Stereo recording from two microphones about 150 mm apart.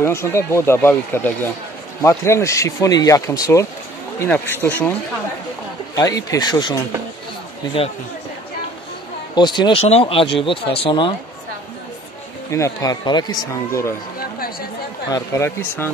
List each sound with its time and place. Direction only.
0.0 s speech: 15° left (ahead or behind)
5.9 s speech: 25° left (ahead or behind)
9.3 s speech: 30° left (ahead or behind)
12.4 s speech: 20° left (ahead or behind)
15.0 s speech: 20° left (ahead or behind)